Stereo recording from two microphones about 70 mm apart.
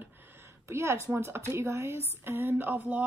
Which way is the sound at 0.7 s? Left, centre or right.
Right.